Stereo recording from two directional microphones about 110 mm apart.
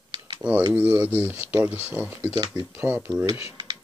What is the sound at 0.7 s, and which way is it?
Speech, 15° right (ahead or behind).